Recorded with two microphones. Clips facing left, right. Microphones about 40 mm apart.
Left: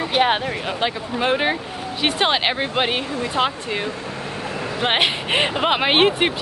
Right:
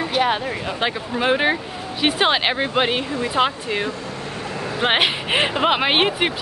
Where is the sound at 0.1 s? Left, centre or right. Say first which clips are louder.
Left 2 dB; left.